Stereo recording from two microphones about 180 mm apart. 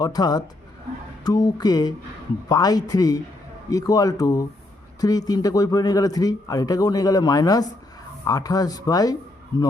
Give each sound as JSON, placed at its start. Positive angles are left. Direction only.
{"t": 0.0, "sound": "speech", "side_deg": 20}